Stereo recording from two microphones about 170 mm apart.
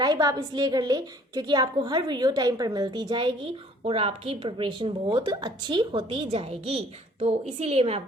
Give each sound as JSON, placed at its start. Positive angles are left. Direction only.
{"t": 0.0, "sound": "a woman's voice", "side_deg": -20}